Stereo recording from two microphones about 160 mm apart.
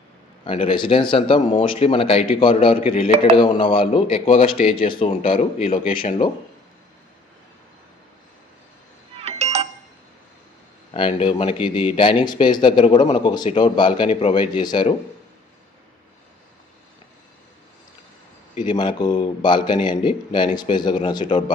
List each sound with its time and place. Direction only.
0.5 s speech: 35° left (ahead or behind)
9.1 s a sound: 40° right (ahead or behind)
10.9 s speech: 30° left (ahead or behind)
18.5 s speech: 30° left (ahead or behind)